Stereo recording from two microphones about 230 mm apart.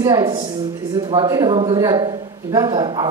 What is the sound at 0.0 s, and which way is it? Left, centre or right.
A woman's voice, centre.